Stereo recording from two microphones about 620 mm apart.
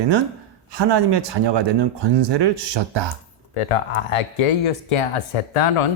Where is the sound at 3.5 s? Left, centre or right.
Left.